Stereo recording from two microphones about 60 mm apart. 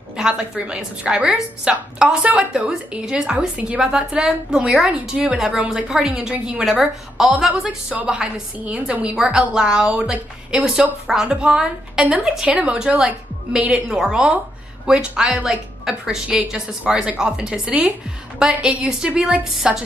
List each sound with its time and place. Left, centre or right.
0.2 s a woman's voice: centre
8.5 s a woman's voice: centre
12.4 s a woman's voice: right